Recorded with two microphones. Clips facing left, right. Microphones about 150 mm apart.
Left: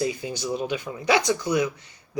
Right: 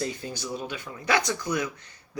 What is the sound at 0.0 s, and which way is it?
Speech, 15° left (ahead or behind).